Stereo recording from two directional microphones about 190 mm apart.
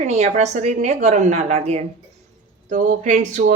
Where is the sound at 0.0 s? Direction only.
35° right (ahead or behind).